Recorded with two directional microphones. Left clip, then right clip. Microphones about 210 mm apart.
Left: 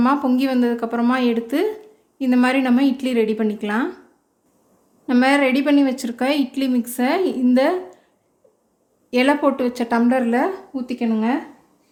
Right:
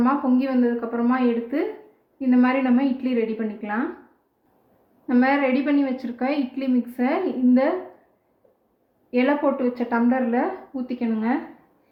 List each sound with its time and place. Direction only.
0.0 s a woman's voice: 55° left (ahead or behind)
5.0 s a woman's voice: 60° left (ahead or behind)
9.0 s a woman's voice: 60° left (ahead or behind)